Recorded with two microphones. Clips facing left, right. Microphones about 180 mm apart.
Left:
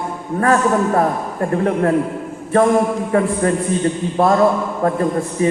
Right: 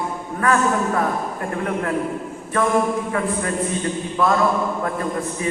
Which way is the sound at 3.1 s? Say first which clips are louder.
Left 7 dB; 40° left (ahead or behind).